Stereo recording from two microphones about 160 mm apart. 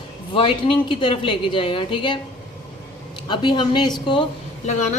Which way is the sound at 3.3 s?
30° left (ahead or behind).